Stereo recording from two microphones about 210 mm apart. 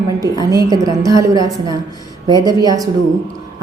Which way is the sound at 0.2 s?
15° right (ahead or behind).